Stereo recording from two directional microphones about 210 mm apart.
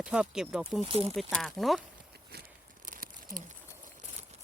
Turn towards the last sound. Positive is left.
turn(degrees=-40)  # may be behind; listen again after turning